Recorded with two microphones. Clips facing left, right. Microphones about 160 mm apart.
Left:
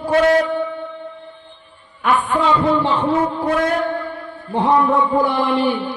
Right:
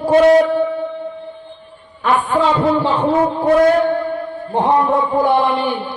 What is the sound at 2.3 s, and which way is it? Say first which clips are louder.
A man's voice: right 2 dB; 35° right (ahead or behind).